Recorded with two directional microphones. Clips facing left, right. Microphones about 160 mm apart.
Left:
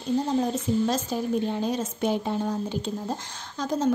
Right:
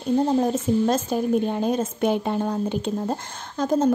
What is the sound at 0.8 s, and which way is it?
A woman's voice, 55° right (ahead or behind).